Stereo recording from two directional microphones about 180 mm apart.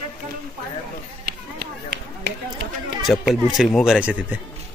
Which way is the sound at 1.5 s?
70° right (ahead or behind).